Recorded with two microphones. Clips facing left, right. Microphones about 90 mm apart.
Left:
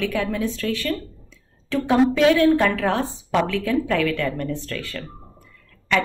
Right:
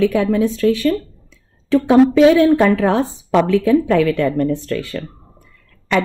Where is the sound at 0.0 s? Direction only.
20° right (ahead or behind).